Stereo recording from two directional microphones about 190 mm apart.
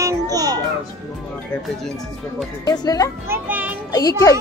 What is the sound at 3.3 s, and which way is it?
Speech, 10° right (ahead or behind).